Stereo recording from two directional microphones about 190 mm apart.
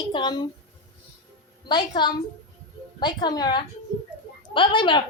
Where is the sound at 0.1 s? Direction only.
25° left (ahead or behind).